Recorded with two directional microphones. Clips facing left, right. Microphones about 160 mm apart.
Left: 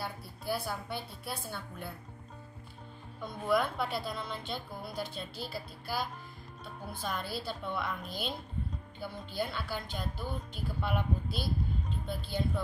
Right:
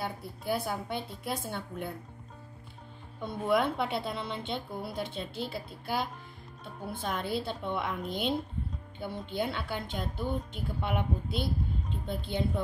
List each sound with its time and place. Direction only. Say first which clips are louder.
0.0 s a woman's voice: right 3 dB; 20° right (ahead or behind)
3.2 s a woman's voice: right 2 dB; 25° right (ahead or behind)